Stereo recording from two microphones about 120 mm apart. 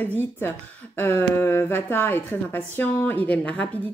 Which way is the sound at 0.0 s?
15° left (ahead or behind).